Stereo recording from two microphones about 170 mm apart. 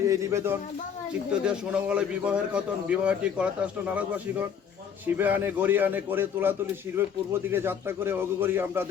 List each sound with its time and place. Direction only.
0.1 s a man's voice: 15° right (ahead or behind)
1.3 s a man's voice: 5° right (ahead or behind)